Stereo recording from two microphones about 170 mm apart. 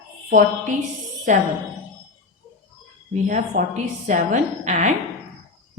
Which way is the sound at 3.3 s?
50° right (ahead or behind).